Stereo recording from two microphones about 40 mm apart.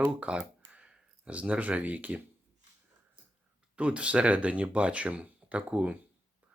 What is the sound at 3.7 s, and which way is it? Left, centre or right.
Speech, right.